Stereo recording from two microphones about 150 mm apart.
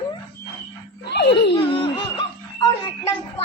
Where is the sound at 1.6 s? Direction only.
35° left (ahead or behind).